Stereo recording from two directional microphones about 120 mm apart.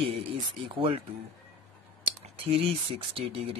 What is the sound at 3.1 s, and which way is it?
Speech, 50° right (ahead or behind).